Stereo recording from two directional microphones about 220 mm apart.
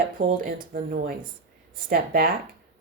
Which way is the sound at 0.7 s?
40° right (ahead or behind).